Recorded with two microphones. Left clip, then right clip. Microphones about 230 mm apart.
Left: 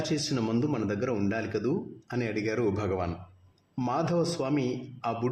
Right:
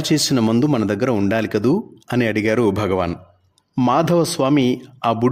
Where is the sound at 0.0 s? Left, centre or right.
Right.